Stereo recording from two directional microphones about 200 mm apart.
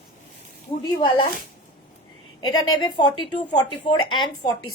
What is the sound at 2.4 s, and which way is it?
A woman's voice, 20° left (ahead or behind).